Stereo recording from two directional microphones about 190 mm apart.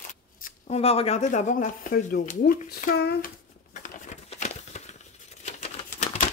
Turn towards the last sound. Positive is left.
turn(degrees=35)  # may be behind; listen again after turning